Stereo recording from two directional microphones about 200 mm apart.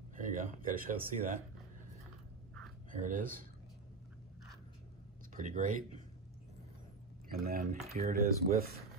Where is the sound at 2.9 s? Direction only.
40° right (ahead or behind).